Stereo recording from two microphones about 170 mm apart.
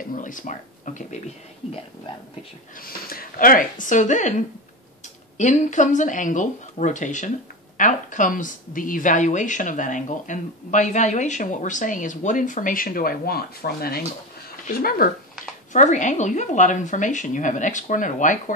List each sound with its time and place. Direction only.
0.1 s speech: 50° left (ahead or behind)
2.8 s speech: 60° left (ahead or behind)
15.7 s speech: 45° left (ahead or behind)